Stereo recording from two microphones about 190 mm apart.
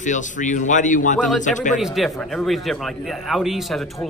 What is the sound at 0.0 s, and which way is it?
A man's voice, 40° left (ahead or behind).